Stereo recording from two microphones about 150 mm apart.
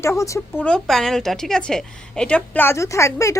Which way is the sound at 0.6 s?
5° left (ahead or behind).